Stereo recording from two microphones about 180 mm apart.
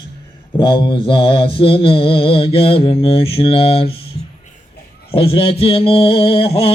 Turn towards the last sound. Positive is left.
turn(degrees=30)  # may be behind; listen again after turning